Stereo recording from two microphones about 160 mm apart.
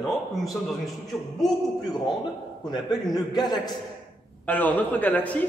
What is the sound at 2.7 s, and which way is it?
A man's voice, 25° left (ahead or behind).